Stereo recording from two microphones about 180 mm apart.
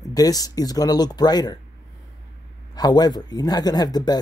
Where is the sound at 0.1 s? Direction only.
20° left (ahead or behind).